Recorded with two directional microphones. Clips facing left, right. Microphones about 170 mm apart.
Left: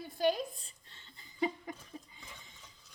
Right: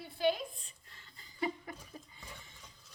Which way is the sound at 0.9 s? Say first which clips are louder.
Left 1 dB; 25° left (ahead or behind).